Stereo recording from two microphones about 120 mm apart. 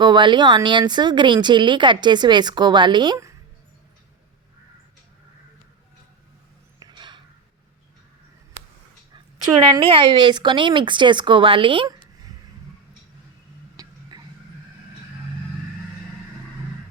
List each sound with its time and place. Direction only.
0.0 s speech: 40° right (ahead or behind)
6.7 s a sound: 40° right (ahead or behind)
9.8 s speech: 45° right (ahead or behind)
13.8 s tick-tock: 30° right (ahead or behind)